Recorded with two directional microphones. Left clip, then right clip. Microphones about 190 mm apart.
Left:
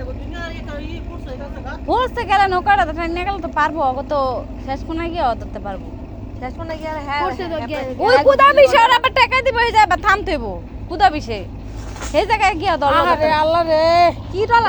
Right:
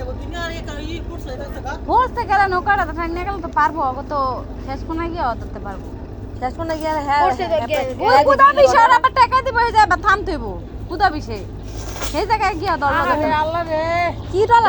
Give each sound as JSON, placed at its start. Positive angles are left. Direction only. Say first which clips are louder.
{"t": 0.3, "sound": "vehicle", "louder": "right 3 dB", "side_deg": -50}
{"t": 1.9, "sound": "speech", "louder": "even", "side_deg": 20}
{"t": 6.4, "sound": "speech", "louder": "right 5 dB", "side_deg": -25}
{"t": 8.3, "sound": "speech", "louder": "left 3 dB", "side_deg": 25}
{"t": 12.9, "sound": "speech", "louder": "left 4 dB", "side_deg": 60}
{"t": 14.3, "sound": "speech", "louder": "right 4 dB", "side_deg": -25}